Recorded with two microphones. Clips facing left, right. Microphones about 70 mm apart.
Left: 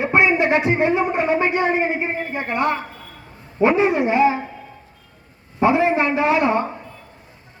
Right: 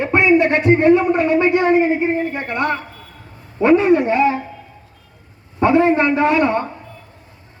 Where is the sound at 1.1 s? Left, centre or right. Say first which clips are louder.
Right 4 dB; centre.